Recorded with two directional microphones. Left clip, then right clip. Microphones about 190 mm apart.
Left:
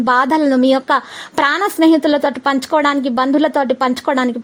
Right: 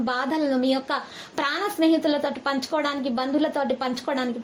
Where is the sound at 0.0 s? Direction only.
45° left (ahead or behind).